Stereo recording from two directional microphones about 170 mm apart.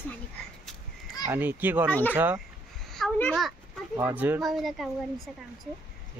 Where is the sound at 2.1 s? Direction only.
10° right (ahead or behind).